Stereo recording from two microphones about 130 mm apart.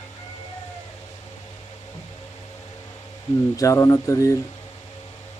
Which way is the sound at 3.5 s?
25° left (ahead or behind).